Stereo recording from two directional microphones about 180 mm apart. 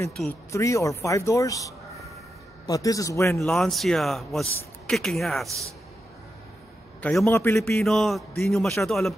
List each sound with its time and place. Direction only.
0.1 s speech: 5° left (ahead or behind)
0.5 s a man's voice: 15° left (ahead or behind)
3.3 s speech: centre (ahead or behind)
7.0 s speech: 10° left (ahead or behind)
7.8 s speech: centre (ahead or behind)